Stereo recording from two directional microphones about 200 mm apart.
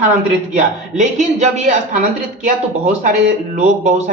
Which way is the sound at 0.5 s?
35° right (ahead or behind).